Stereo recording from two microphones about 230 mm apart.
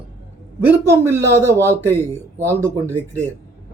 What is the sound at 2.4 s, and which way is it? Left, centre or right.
Speech, centre.